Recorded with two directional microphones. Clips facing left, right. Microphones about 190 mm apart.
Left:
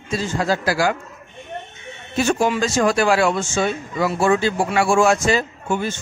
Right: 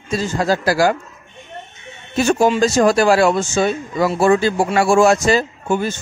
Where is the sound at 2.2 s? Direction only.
40° right (ahead or behind).